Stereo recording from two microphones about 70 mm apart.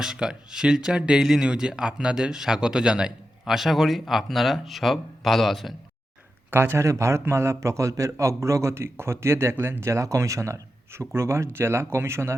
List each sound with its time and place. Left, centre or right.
0.0 s speech: centre
6.5 s a man's voice: right